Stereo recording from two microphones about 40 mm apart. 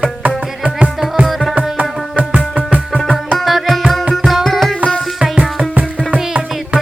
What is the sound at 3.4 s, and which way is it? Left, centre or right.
Music, centre.